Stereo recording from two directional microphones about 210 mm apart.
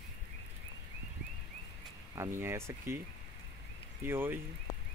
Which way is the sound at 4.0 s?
10° right (ahead or behind).